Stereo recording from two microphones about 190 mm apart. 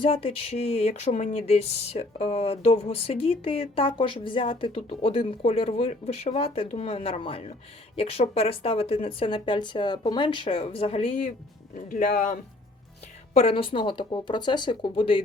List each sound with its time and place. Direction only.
0.0 s speech: 30° left (ahead or behind)
11.9 s speech: 45° left (ahead or behind)
13.3 s speech: 30° left (ahead or behind)